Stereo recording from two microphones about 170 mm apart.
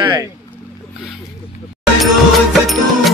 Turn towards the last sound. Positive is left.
turn(degrees=0)  # may be behind; listen again after turning